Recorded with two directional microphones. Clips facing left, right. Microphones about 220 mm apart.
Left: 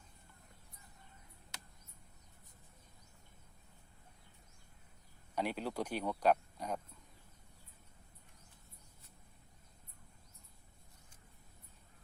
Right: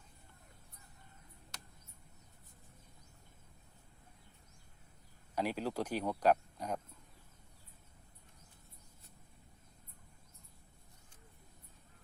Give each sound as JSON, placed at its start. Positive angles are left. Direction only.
{"t": 5.3, "sound": "speech", "side_deg": -10}